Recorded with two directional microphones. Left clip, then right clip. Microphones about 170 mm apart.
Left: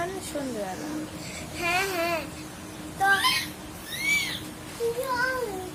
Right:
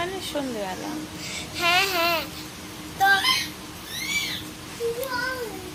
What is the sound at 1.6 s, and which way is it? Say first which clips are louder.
Speech: right 5 dB; 15° left (ahead or behind).